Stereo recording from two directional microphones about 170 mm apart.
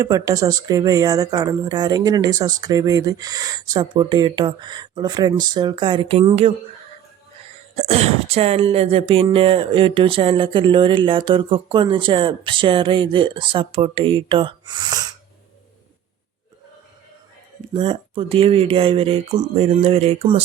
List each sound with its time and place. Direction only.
0.0 s speech: 20° right (ahead or behind)
7.8 s speech: 40° right (ahead or behind)
17.7 s speech: 30° right (ahead or behind)